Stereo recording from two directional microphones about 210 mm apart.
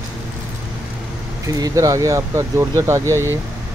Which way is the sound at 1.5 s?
15° right (ahead or behind).